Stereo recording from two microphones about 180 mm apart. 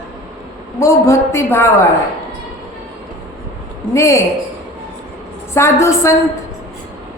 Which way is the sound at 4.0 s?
15° left (ahead or behind).